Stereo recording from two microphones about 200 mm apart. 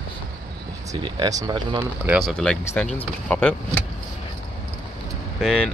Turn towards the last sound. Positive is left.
turn(degrees=5)  # may be behind; listen again after turning